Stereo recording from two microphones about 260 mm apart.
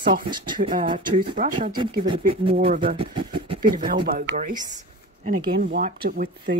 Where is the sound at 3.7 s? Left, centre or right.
Right.